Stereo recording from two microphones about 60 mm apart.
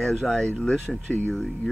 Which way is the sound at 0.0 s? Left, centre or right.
Centre.